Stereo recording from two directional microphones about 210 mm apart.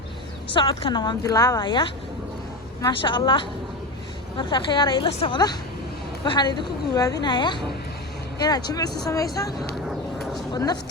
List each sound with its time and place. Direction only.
0.5 s a woman's voice: 25° left (ahead or behind)